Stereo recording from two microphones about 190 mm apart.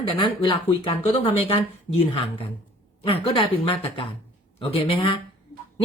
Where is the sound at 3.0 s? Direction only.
30° left (ahead or behind).